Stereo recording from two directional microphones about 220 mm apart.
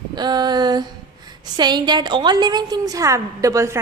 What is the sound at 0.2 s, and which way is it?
A woman's voice, 20° right (ahead or behind).